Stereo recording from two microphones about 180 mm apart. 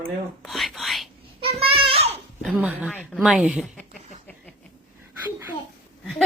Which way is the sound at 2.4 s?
5° right (ahead or behind).